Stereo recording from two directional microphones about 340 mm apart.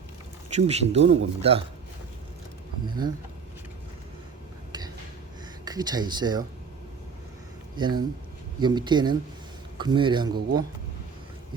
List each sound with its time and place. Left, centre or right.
0.5 s a man's voice: centre
2.8 s a man's voice: centre
5.6 s a man's voice: centre
7.8 s a man's voice: centre